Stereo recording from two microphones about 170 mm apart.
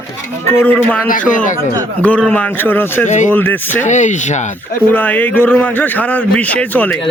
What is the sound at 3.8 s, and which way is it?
Speech, 45° left (ahead or behind).